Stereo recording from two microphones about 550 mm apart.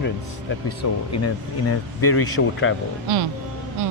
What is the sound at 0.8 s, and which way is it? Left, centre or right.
Speech, left.